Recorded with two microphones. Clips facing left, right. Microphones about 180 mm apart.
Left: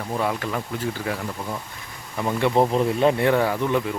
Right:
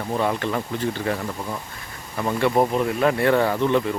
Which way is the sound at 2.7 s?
25° left (ahead or behind).